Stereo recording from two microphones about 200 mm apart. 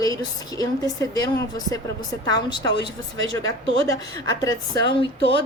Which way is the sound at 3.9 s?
15° left (ahead or behind).